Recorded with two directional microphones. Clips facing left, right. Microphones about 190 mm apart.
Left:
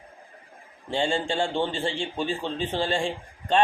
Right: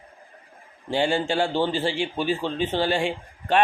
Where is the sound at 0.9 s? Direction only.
25° left (ahead or behind).